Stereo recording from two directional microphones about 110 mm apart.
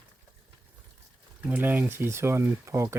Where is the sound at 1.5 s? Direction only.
15° right (ahead or behind).